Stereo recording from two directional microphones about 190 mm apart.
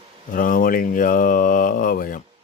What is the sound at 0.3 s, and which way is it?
Speech, 45° left (ahead or behind).